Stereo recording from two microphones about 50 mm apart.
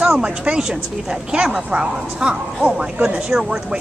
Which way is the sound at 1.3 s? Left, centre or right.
Centre.